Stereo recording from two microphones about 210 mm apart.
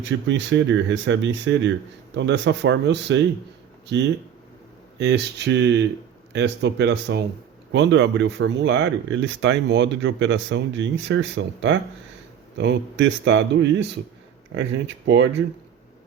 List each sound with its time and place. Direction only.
0.0 s speech: 60° right (ahead or behind)
15.0 s speech: 55° right (ahead or behind)